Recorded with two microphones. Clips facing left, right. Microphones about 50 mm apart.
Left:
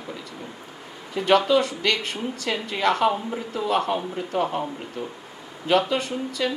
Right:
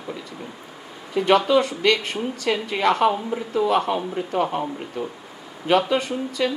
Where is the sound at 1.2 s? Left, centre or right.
Right.